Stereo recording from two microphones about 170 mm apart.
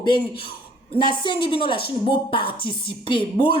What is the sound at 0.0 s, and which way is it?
A woman's voice, 25° left (ahead or behind).